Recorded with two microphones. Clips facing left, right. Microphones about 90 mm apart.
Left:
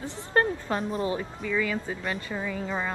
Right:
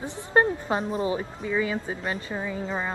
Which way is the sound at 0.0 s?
20° right (ahead or behind).